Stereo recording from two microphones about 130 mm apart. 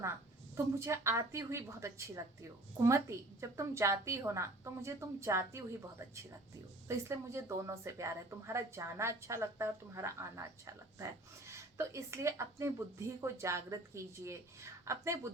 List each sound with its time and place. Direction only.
0.5 s speech: 20° right (ahead or behind)
6.8 s speech: 20° right (ahead or behind)